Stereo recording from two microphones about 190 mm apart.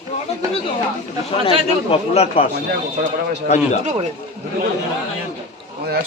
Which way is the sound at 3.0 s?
50° right (ahead or behind).